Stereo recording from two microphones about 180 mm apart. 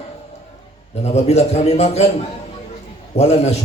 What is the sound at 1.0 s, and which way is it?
A man's voice, 35° left (ahead or behind).